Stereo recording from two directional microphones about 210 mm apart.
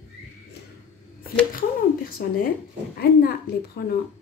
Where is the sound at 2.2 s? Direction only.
45° left (ahead or behind).